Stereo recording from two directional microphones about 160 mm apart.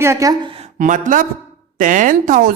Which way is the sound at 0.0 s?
20° right (ahead or behind).